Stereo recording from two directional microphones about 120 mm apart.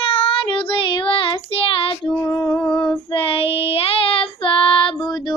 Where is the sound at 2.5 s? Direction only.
5° left (ahead or behind).